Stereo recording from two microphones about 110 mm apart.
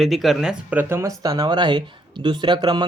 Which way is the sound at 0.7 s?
25° right (ahead or behind).